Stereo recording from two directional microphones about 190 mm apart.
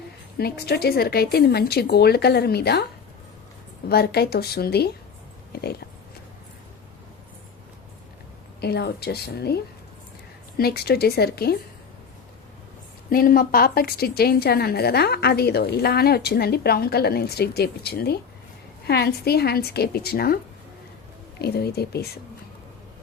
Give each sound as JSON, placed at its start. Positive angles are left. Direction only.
{"t": 0.6, "sound": "a woman's voice", "side_deg": 55}
{"t": 3.8, "sound": "a woman's voice", "side_deg": 55}
{"t": 8.6, "sound": "a woman's voice", "side_deg": 55}
{"t": 10.6, "sound": "a woman's voice", "side_deg": 55}
{"t": 13.1, "sound": "a woman's voice", "side_deg": 50}